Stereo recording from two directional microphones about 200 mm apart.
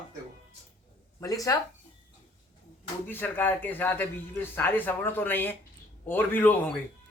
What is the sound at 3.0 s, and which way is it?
A man's voice, 10° left (ahead or behind).